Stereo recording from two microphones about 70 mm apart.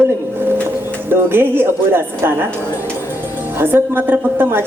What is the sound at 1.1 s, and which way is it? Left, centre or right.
Speech, right.